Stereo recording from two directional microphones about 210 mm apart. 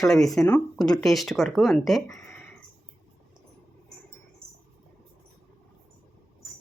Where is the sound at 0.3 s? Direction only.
5° left (ahead or behind).